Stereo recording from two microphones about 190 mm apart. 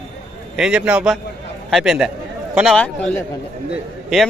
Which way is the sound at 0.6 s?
5° right (ahead or behind).